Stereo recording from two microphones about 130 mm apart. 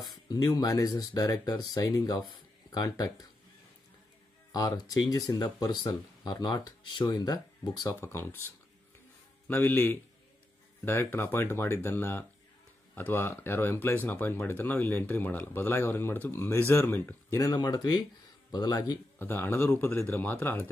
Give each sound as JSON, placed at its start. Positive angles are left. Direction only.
{"t": 0.0, "sound": "speech", "side_deg": 30}
{"t": 4.5, "sound": "speech", "side_deg": 30}
{"t": 7.8, "sound": "speech", "side_deg": 20}
{"t": 9.5, "sound": "speech", "side_deg": 15}
{"t": 19.1, "sound": "speech", "side_deg": 15}